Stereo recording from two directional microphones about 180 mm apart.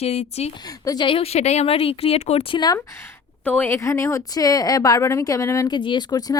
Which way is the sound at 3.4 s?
10° left (ahead or behind).